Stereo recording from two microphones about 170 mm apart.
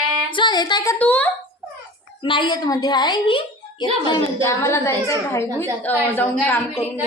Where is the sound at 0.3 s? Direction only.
30° left (ahead or behind).